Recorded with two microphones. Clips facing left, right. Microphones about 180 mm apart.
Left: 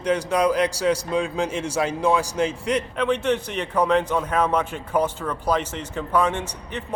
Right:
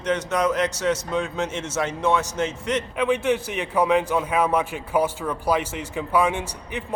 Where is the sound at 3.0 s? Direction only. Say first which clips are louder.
Right 3 dB; 10° right (ahead or behind).